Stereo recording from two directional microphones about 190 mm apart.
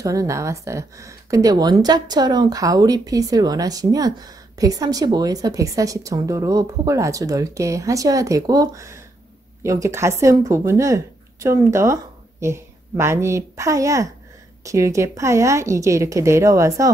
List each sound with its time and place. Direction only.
0.0 s a woman's voice: 15° right (ahead or behind)